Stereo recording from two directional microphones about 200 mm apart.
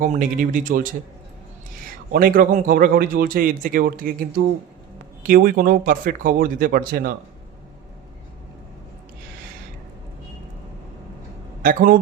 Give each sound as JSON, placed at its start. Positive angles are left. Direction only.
{"t": 0.0, "sound": "speech", "side_deg": -40}
{"t": 2.1, "sound": "a man's voice", "side_deg": -45}
{"t": 11.6, "sound": "a man's voice", "side_deg": -45}